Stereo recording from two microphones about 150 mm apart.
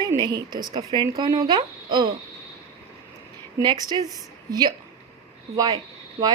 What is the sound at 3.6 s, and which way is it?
Speech, 25° right (ahead or behind).